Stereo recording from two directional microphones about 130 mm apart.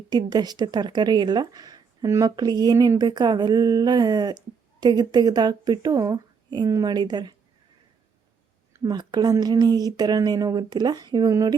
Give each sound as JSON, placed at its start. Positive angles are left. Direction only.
{"t": 0.1, "sound": "speech", "side_deg": -30}
{"t": 8.7, "sound": "speech", "side_deg": -30}